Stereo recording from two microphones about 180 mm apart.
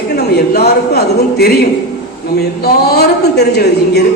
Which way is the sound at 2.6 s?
60° left (ahead or behind).